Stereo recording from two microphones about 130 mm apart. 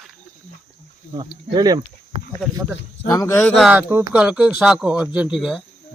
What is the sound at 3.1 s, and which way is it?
Speech, 20° left (ahead or behind).